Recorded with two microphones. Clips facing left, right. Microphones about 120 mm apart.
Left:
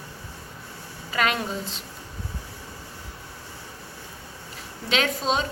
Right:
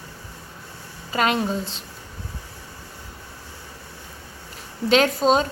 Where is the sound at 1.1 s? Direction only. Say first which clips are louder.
Right 3 dB; 30° right (ahead or behind).